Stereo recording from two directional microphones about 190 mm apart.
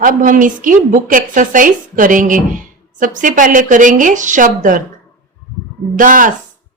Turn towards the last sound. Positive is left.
turn(degrees=-45)  # may be behind; listen again after turning